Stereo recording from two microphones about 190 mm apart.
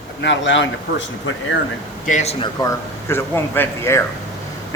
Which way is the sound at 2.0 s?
40° left (ahead or behind).